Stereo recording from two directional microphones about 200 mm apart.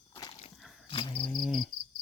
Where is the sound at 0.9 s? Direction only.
25° left (ahead or behind).